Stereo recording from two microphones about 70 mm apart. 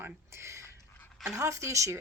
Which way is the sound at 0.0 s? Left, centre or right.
Right.